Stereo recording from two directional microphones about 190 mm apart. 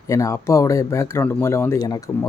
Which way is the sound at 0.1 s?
15° left (ahead or behind).